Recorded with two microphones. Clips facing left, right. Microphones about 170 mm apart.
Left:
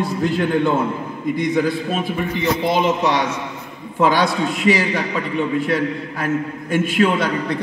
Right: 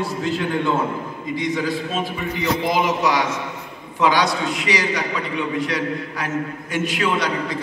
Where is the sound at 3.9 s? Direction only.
50° left (ahead or behind).